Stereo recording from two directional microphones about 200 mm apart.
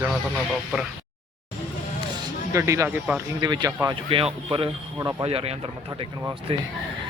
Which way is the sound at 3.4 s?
20° right (ahead or behind).